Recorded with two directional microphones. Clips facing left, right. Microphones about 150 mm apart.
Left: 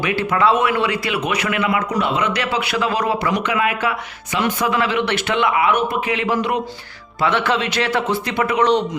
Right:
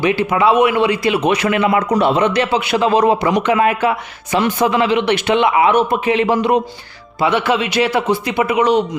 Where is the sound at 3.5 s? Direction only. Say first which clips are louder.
Right 6 dB; 35° right (ahead or behind).